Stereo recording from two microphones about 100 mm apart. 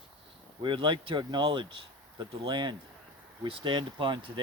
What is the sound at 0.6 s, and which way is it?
Speech, 50° right (ahead or behind).